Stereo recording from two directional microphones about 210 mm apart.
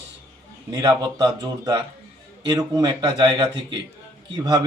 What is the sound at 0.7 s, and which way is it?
Speech, 20° right (ahead or behind).